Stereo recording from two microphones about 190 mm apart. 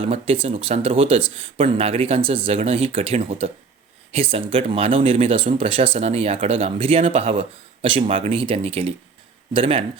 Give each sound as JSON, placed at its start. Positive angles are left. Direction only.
{"t": 0.0, "sound": "speech", "side_deg": -30}